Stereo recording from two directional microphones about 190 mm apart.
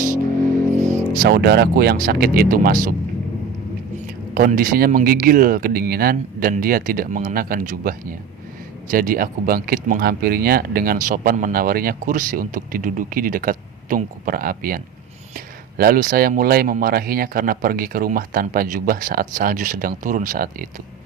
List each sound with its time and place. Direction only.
1.1 s speech: 55° right (ahead or behind)
4.4 s speech: 45° right (ahead or behind)
15.8 s speech: 45° right (ahead or behind)